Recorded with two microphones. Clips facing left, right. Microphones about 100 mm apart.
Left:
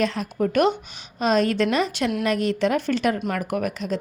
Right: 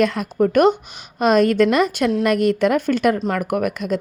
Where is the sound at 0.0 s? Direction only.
55° right (ahead or behind).